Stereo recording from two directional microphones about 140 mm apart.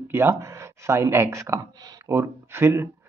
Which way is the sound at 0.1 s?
15° right (ahead or behind).